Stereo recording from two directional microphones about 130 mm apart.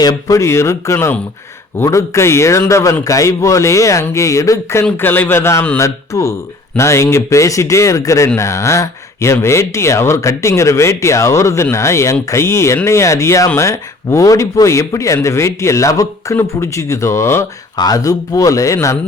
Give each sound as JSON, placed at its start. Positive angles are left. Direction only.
{"t": 0.0, "sound": "speech", "side_deg": 30}